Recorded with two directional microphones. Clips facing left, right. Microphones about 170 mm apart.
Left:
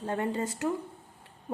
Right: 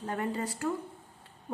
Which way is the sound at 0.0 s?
30° left (ahead or behind).